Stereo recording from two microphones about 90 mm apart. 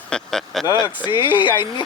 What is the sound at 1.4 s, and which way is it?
Speech, 60° left (ahead or behind).